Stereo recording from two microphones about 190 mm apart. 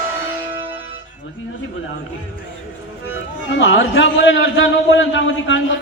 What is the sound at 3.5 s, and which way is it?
A man's voice, 80° left.